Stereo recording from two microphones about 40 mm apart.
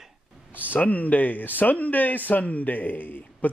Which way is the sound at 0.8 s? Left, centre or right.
Left.